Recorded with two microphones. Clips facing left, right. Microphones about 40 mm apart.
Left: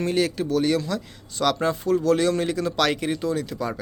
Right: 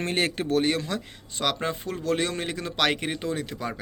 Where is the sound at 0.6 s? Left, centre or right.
Right.